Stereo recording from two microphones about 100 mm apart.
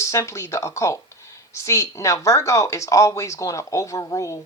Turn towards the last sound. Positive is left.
turn(degrees=35)  # may be behind; listen again after turning